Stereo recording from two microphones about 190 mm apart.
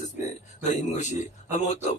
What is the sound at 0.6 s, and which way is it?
A man's voice, 40° left (ahead or behind).